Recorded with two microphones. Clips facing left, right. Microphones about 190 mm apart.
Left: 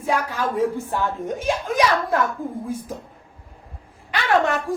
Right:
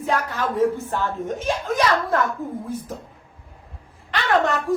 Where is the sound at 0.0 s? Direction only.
10° left (ahead or behind).